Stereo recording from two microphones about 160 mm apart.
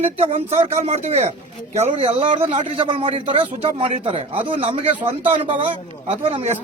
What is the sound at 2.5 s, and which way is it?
Speech, 50° right (ahead or behind).